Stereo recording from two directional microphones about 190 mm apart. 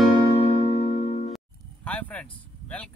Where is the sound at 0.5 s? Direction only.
35° left (ahead or behind).